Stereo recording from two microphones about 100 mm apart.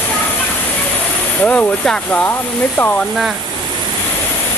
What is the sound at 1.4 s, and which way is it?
Speech, 10° left (ahead or behind).